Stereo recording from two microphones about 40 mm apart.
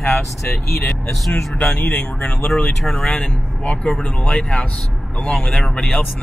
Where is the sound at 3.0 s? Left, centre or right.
Left.